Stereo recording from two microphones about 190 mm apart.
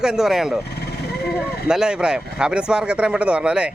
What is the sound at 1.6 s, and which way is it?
A man's voice, 5° right (ahead or behind).